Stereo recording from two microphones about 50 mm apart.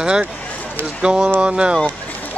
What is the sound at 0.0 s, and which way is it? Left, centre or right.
Speech, centre.